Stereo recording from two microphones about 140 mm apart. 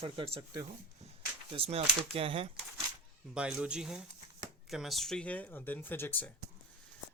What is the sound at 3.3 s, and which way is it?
Speech, 5° right (ahead or behind).